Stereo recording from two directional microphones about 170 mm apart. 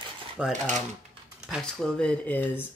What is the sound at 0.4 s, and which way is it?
Speech, 5° right (ahead or behind).